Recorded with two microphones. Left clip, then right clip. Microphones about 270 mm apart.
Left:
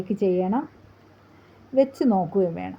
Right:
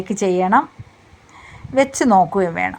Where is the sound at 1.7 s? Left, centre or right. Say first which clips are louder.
Right 7 dB; right.